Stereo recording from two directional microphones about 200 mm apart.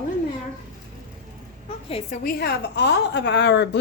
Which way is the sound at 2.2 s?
55° left (ahead or behind).